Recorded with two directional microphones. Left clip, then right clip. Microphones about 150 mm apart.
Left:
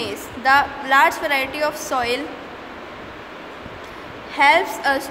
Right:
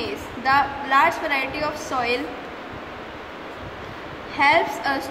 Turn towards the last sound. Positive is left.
turn(degrees=45)  # may be behind; listen again after turning